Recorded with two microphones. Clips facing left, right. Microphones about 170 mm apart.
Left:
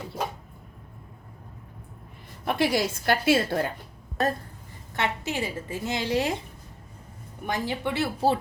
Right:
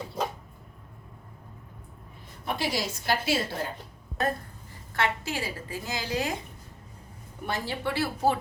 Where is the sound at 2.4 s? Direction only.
55° left (ahead or behind).